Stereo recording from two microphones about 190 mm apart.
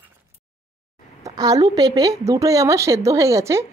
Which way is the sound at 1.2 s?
20° right (ahead or behind).